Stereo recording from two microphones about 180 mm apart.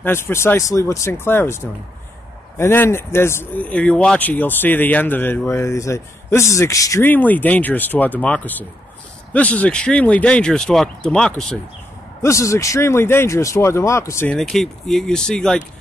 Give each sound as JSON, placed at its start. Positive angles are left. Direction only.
{"t": 0.0, "sound": "speech", "side_deg": 15}
{"t": 12.2, "sound": "speech", "side_deg": 15}
{"t": 14.3, "sound": "speech", "side_deg": 5}